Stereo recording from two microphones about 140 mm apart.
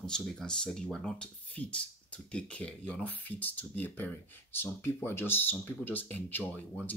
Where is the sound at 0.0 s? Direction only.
5° left (ahead or behind).